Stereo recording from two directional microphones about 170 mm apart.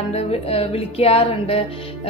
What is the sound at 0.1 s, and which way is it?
A woman's voice, 35° left (ahead or behind).